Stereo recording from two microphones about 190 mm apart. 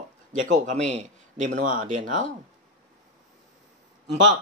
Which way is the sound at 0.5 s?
40° right (ahead or behind).